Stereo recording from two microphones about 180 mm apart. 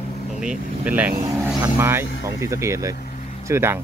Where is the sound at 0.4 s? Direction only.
5° right (ahead or behind).